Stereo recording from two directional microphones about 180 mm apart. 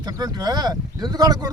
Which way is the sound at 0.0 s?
20° right (ahead or behind).